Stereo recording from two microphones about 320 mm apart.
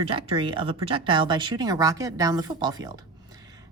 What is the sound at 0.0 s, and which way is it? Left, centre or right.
A woman's voice, centre.